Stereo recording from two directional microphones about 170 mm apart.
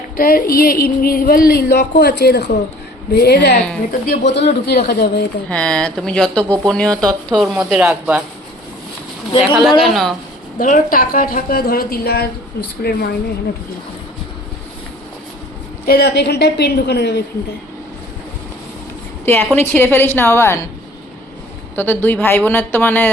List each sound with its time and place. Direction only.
0.2 s a woman's voice: 60° left (ahead or behind); by 3.6 s 75° left (ahead or behind)
4.1 s a woman's voice: 90° left; by 5.2 s 70° left (ahead or behind)
5.5 s speech: 5° left (ahead or behind)
9.4 s speech: centre (ahead or behind)
10.6 s speech: 55° left (ahead or behind)
15.9 s a woman's voice: 70° left (ahead or behind)
19.2 s a woman's voice: 15° left (ahead or behind)
21.8 s a woman's voice: 10° left (ahead or behind)